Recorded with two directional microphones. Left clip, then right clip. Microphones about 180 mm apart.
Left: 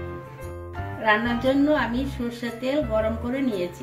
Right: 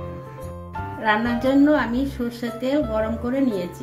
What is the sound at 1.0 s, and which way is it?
A woman's voice, 35° right (ahead or behind).